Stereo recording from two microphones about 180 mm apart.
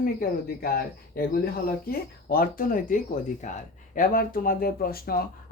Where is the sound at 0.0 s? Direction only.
50° left (ahead or behind).